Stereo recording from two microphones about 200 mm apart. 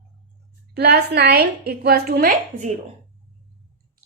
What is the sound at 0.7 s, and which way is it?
A woman's voice, 55° right (ahead or behind).